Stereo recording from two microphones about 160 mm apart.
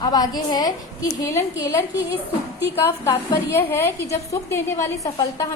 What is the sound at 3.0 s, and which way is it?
A woman's voice, 15° left (ahead or behind).